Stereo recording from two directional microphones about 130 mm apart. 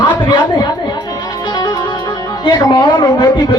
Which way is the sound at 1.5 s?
35° left (ahead or behind).